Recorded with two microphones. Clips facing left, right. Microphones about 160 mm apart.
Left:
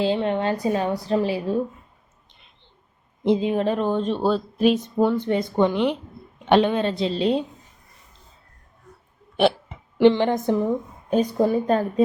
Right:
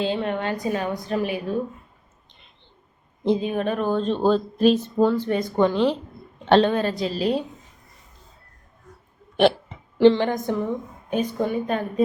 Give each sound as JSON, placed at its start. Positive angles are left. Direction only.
{"t": 0.1, "sound": "a woman's voice", "side_deg": 25}
{"t": 3.2, "sound": "speech", "side_deg": 25}
{"t": 10.0, "sound": "a woman's voice", "side_deg": 20}